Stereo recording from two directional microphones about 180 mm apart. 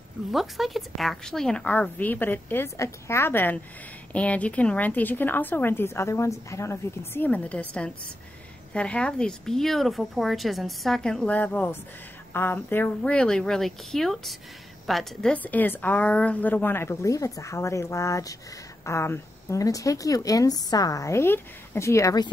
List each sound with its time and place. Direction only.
0.3 s a woman's voice: centre (ahead or behind); by 22.3 s 20° left (ahead or behind)